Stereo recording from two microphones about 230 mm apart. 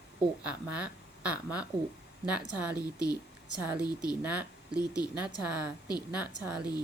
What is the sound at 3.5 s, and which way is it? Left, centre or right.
A woman's voice, centre.